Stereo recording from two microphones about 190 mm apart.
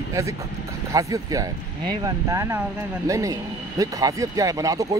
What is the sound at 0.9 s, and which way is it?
Speech, 15° right (ahead or behind).